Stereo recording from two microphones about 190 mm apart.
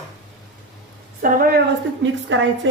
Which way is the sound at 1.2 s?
50° right (ahead or behind).